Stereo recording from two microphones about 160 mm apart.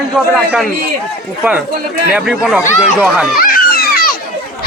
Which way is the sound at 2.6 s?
50° left (ahead or behind).